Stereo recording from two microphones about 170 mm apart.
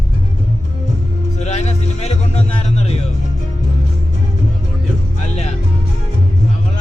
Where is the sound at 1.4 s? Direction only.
40° left (ahead or behind).